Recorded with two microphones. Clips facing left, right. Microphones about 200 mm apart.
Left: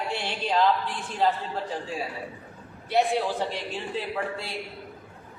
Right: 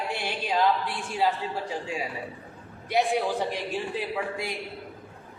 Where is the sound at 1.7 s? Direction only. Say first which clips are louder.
Even; 15° right (ahead or behind).